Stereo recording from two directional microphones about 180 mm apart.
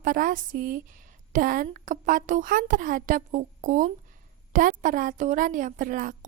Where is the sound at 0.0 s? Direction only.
50° right (ahead or behind).